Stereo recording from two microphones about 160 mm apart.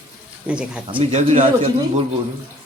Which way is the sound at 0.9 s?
40° right (ahead or behind).